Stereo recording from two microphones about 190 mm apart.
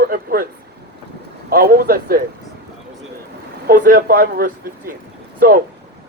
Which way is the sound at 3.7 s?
45° right (ahead or behind).